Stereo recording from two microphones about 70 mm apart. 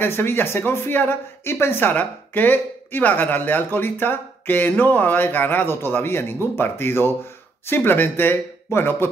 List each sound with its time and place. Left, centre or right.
0.0 s speech: left